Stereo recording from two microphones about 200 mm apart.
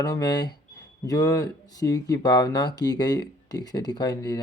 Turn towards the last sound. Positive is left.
turn(degrees=20)  # may be behind; listen again after turning